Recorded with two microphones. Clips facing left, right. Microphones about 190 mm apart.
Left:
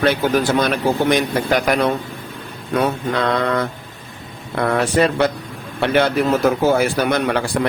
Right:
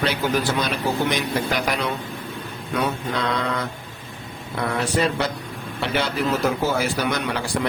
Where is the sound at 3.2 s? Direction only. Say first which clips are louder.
Left 7 dB; 55° left (ahead or behind).